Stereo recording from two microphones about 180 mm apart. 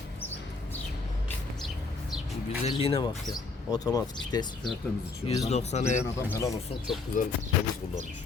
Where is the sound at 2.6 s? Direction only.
30° left (ahead or behind).